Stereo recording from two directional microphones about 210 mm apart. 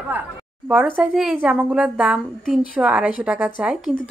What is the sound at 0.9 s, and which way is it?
A woman's voice, 5° right (ahead or behind).